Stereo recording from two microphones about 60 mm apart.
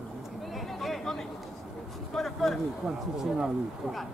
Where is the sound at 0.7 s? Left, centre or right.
Centre.